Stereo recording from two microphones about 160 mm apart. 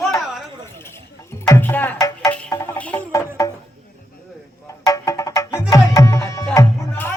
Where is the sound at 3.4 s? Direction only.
20° left (ahead or behind).